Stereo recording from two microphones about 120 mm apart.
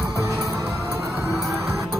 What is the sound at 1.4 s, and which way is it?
Music, 25° right (ahead or behind).